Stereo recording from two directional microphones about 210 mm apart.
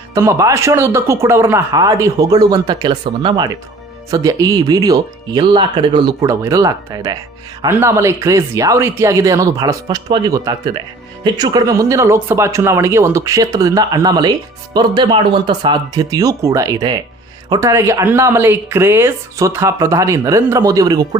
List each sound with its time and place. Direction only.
0.1 s speech: 15° right (ahead or behind)